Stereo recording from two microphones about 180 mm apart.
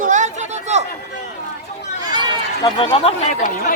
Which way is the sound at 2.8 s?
35° left (ahead or behind).